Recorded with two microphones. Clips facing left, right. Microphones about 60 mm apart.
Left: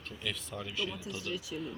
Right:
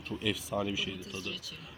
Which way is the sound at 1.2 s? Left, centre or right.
Centre.